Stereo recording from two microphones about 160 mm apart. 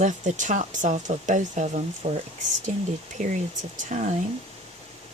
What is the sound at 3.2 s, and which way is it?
Speech, 50° right (ahead or behind).